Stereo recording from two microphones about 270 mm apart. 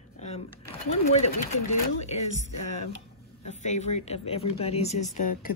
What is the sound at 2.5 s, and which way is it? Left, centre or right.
Speech, left.